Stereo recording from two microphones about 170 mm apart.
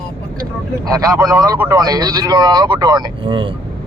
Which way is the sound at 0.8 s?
20° right (ahead or behind).